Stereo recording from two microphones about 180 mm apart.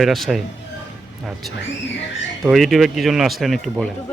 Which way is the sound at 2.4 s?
Centre (ahead or behind).